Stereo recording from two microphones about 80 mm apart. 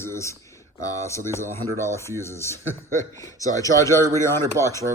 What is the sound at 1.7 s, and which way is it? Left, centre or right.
Speech, right.